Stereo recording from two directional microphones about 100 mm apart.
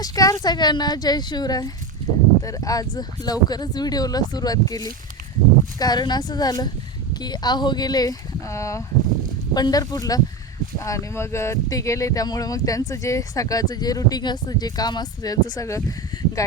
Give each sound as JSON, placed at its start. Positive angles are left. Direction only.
{"t": 0.0, "sound": "speech", "side_deg": 40}
{"t": 9.6, "sound": "speech", "side_deg": 40}